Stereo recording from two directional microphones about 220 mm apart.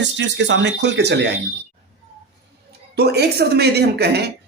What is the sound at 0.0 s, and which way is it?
A woman's voice, 55° right (ahead or behind).